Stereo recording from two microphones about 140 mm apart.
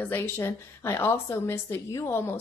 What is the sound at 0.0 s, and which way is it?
A woman's voice, 15° left (ahead or behind).